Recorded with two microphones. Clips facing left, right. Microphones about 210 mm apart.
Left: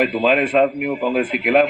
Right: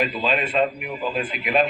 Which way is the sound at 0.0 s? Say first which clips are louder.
Left 7 dB; 70° left (ahead or behind).